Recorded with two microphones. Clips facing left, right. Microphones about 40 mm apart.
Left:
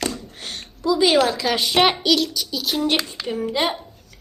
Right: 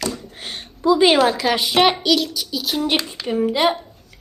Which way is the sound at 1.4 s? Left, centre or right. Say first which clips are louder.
Right 2 dB; centre.